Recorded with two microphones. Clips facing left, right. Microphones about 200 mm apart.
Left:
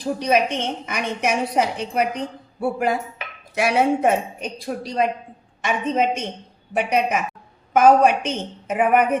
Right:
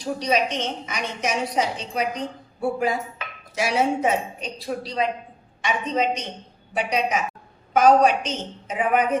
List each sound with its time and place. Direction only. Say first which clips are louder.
0.0 s a woman's voice: left 3 dB; 55° left (ahead or behind)